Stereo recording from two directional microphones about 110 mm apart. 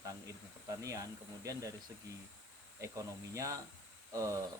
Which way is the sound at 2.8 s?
25° right (ahead or behind).